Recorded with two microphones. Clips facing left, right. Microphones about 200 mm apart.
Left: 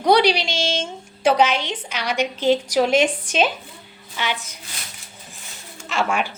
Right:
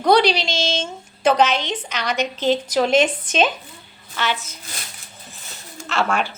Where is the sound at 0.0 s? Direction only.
15° left (ahead or behind).